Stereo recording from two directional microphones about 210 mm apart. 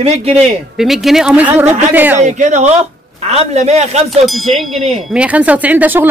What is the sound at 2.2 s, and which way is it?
Speech, 35° right (ahead or behind).